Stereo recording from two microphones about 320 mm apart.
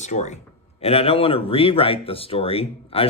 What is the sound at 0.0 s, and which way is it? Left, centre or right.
Speech, left.